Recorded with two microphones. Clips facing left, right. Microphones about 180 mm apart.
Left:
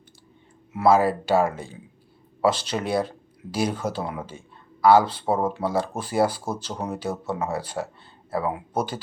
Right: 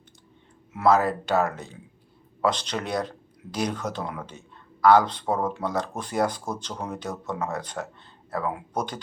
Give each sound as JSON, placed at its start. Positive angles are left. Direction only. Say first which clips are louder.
{"t": 0.7, "sound": "speech", "louder": "left 2 dB", "side_deg": 5}